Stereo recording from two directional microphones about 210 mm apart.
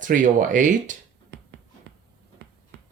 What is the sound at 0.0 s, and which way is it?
Speech, 40° right (ahead or behind).